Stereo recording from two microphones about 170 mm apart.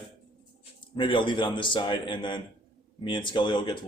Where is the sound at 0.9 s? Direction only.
30° left (ahead or behind).